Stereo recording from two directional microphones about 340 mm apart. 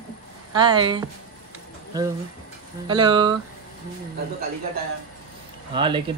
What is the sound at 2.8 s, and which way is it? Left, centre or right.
Speech, centre.